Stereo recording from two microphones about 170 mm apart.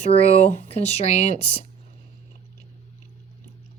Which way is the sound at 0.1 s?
40° left (ahead or behind).